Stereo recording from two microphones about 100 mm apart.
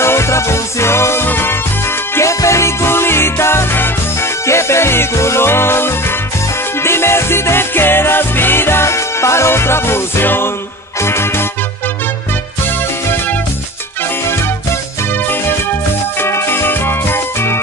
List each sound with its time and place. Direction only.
0.0 s music: 25° left (ahead or behind)
16.2 s music: 25° left (ahead or behind)